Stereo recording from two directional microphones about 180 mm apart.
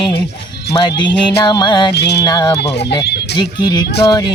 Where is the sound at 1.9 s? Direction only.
65° left (ahead or behind).